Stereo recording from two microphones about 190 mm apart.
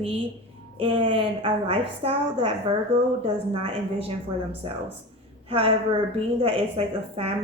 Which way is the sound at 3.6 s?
30° right (ahead or behind).